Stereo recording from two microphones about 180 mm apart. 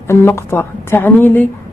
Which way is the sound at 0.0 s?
15° left (ahead or behind).